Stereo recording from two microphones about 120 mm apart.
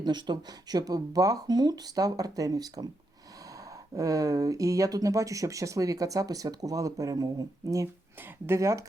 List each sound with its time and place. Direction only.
0.0 s speech: 40° right (ahead or behind)
3.9 s speech: 30° right (ahead or behind)